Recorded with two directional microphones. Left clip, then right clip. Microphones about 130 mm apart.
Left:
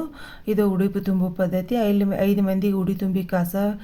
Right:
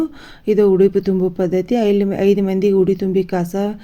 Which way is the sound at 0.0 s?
30° right (ahead or behind).